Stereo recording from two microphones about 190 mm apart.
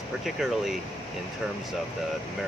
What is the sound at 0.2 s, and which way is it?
Speech, centre (ahead or behind).